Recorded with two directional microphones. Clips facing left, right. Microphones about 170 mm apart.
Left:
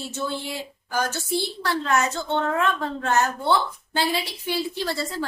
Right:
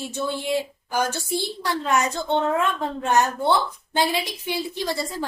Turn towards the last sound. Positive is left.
turn(degrees=-15)  # may be behind; listen again after turning